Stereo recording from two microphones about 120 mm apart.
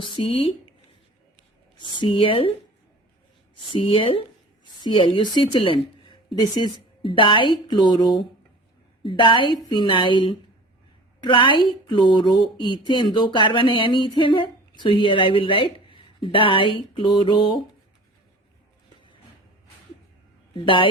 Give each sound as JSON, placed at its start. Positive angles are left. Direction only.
{"t": 0.0, "sound": "speech", "side_deg": 50}
{"t": 1.8, "sound": "speech", "side_deg": 40}
{"t": 3.7, "sound": "a woman's voice", "side_deg": 45}
{"t": 20.5, "sound": "speech", "side_deg": 45}